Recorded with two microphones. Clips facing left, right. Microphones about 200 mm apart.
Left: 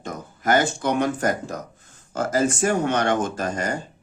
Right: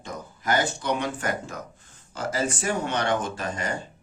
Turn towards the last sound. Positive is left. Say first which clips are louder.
# left 4 dB
turn(degrees=45)  # may be behind; listen again after turning